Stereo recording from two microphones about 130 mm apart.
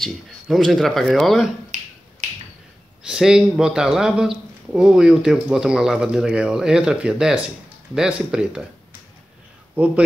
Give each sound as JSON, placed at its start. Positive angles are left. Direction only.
{"t": 0.0, "sound": "speech", "side_deg": 0}
{"t": 1.7, "sound": "finger snapping", "side_deg": -70}
{"t": 3.1, "sound": "speech", "side_deg": -5}